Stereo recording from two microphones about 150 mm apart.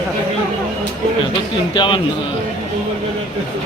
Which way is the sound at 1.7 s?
30° left (ahead or behind).